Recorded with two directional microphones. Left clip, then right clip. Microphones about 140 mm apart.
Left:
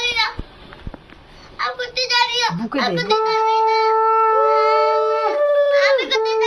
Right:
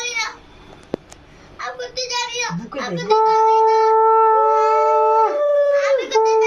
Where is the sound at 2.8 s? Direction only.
20° right (ahead or behind).